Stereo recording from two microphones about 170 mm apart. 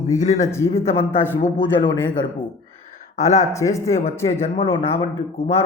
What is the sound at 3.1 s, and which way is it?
Speech, 40° left (ahead or behind).